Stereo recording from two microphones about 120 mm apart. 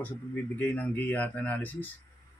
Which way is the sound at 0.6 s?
15° left (ahead or behind).